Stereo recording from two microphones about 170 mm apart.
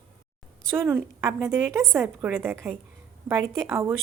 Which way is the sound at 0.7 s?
15° right (ahead or behind).